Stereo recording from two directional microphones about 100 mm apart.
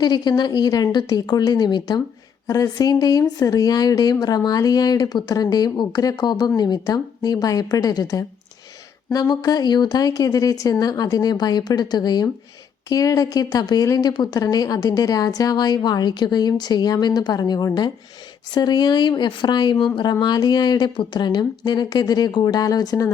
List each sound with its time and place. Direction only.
0.0 s speech: 45° left (ahead or behind)